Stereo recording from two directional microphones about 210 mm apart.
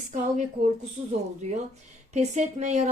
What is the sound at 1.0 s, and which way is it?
Speech, 30° right (ahead or behind).